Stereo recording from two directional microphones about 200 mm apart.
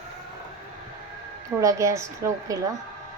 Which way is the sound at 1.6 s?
15° right (ahead or behind).